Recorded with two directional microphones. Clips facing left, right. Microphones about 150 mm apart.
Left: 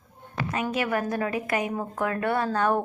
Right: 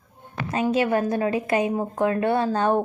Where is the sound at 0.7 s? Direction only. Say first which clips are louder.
Right 6 dB; 25° right (ahead or behind).